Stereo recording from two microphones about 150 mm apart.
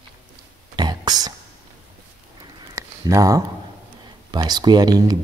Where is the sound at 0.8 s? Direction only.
25° right (ahead or behind).